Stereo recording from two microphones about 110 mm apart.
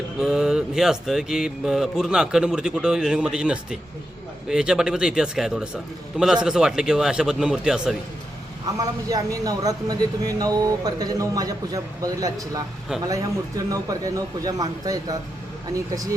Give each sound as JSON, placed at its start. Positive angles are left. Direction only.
{"t": 0.2, "sound": "a man's voice", "side_deg": -5}
{"t": 9.0, "sound": "speech", "side_deg": -35}